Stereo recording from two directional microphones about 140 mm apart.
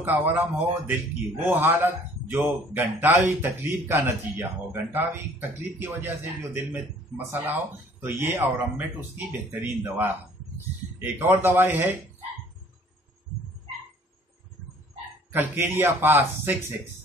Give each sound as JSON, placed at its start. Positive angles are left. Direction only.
{"t": 0.0, "sound": "a man's voice", "side_deg": -15}
{"t": 15.3, "sound": "a man's voice", "side_deg": -15}